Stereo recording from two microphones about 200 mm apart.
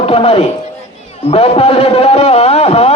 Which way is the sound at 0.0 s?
30° left (ahead or behind).